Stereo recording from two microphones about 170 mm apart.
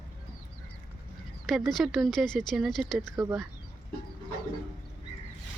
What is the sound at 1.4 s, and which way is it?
Speech, centre (ahead or behind).